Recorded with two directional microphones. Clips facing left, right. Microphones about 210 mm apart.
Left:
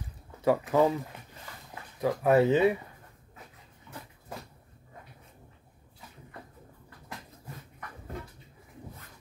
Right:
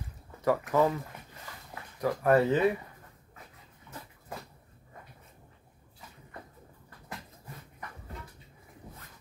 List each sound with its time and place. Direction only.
0.5 s speech: 20° left (ahead or behind)
2.0 s speech: 20° left (ahead or behind)